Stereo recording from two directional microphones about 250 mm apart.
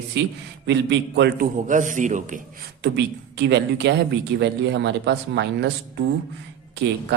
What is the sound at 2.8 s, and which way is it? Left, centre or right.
Speech, right.